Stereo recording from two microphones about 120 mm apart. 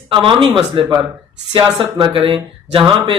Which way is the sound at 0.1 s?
45° right (ahead or behind).